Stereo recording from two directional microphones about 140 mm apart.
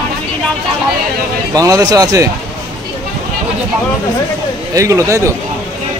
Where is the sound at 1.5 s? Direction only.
25° right (ahead or behind).